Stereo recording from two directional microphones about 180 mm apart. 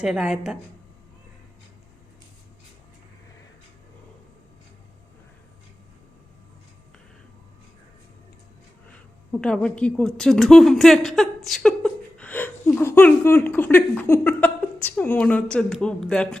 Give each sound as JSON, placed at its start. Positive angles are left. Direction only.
{"t": 0.0, "sound": "a woman's voice", "side_deg": -5}
{"t": 9.4, "sound": "a woman's voice", "side_deg": 5}